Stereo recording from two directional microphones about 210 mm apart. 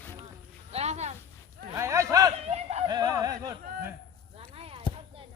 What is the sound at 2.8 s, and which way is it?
Music, 20° right (ahead or behind).